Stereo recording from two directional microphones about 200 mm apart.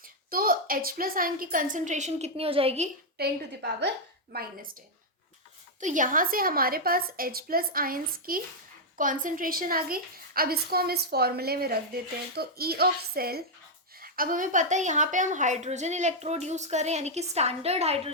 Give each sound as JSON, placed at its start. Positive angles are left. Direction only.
{"t": 0.0, "sound": "a woman's voice", "side_deg": -45}
{"t": 3.2, "sound": "a woman's voice", "side_deg": -50}
{"t": 5.8, "sound": "a woman's voice", "side_deg": -40}